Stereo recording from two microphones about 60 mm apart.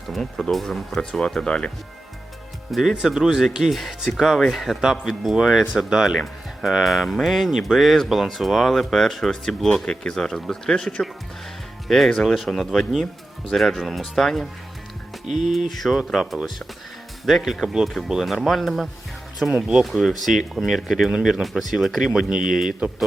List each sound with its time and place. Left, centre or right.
0.1 s speech: centre
1.2 s speech: centre
3.0 s speech: centre
15.4 s speech: centre